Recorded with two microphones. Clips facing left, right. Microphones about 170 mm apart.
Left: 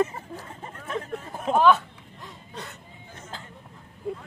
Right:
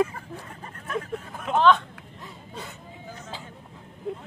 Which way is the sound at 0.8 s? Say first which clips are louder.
Right 1 dB; 30° left (ahead or behind).